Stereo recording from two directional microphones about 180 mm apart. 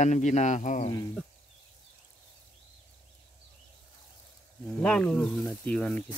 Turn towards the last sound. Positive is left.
turn(degrees=5)  # may be behind; listen again after turning